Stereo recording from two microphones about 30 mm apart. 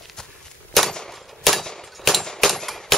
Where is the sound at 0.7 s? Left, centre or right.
Centre.